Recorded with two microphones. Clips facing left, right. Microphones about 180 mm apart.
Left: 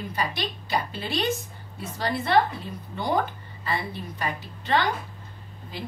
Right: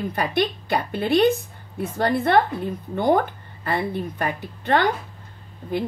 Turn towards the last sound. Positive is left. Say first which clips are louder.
# right 11 dB
turn(degrees=-55)  # may be behind; listen again after turning